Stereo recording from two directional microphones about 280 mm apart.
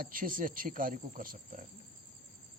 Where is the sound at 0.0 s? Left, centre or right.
Right.